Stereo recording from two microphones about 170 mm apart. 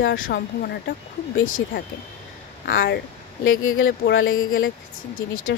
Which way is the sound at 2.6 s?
70° left (ahead or behind).